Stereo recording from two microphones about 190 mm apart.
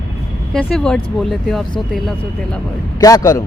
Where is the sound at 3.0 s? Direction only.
20° left (ahead or behind).